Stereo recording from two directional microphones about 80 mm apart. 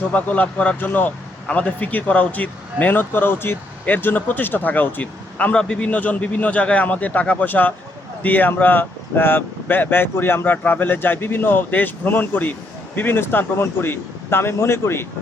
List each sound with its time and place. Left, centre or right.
0.1 s a man's voice: centre